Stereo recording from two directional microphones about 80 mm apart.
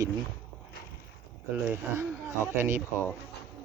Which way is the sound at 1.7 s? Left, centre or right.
Right.